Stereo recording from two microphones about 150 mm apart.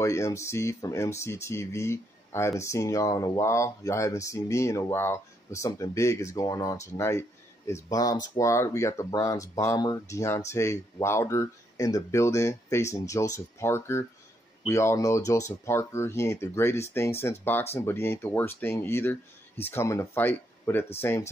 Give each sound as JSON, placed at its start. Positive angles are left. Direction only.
{"t": 0.0, "sound": "speech", "side_deg": 20}